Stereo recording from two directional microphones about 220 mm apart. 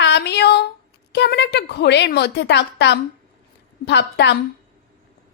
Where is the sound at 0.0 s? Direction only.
50° left (ahead or behind).